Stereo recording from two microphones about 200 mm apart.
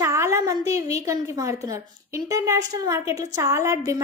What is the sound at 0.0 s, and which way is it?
A woman's voice, 15° right (ahead or behind).